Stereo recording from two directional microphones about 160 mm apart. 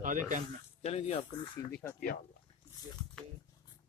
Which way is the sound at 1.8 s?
10° left (ahead or behind).